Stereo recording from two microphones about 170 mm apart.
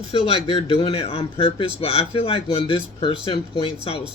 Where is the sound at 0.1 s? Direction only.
35° left (ahead or behind).